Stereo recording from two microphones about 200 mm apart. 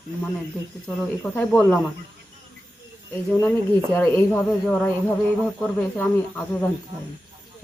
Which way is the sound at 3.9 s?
10° left (ahead or behind).